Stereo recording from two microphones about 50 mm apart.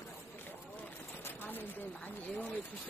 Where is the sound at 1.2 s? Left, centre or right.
Left.